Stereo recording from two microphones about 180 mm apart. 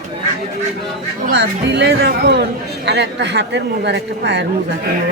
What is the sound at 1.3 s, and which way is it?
Speech, 70° right (ahead or behind).